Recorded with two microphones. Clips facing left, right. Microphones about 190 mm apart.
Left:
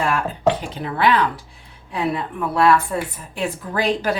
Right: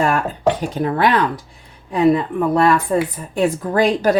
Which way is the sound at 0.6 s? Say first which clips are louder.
Right 3 dB; 45° right (ahead or behind).